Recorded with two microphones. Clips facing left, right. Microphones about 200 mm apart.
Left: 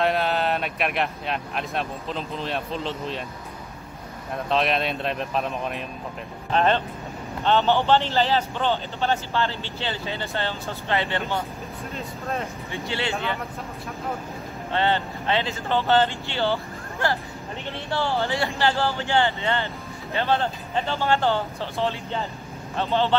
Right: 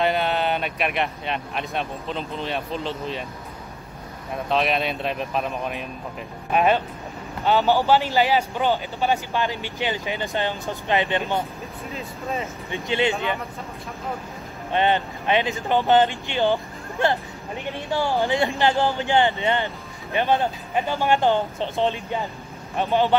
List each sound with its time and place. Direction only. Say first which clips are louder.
0.0 s speech: right 1 dB; centre (ahead or behind)
4.3 s speech: right 1 dB; centre (ahead or behind); by 11.4 s 15° right (ahead or behind)
11.9 s speech: right 1 dB; centre (ahead or behind)
12.7 s speech: right 6 dB; 20° right (ahead or behind)
14.7 s speech: right 2 dB; 15° right (ahead or behind)